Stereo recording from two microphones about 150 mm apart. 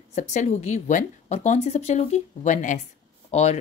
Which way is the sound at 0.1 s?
50° left (ahead or behind).